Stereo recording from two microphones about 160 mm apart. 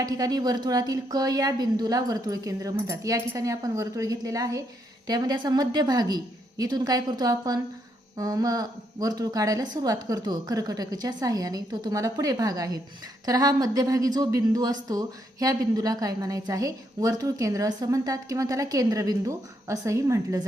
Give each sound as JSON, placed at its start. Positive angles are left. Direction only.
{"t": 0.0, "sound": "speech", "side_deg": -25}